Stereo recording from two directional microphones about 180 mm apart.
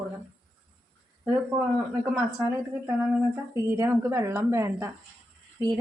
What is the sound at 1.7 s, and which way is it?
A woman's voice, 5° right (ahead or behind).